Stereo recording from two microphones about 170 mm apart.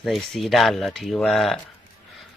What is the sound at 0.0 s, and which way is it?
Speech, centre (ahead or behind).